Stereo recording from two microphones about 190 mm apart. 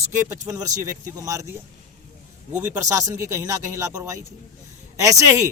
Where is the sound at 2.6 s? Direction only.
15° right (ahead or behind).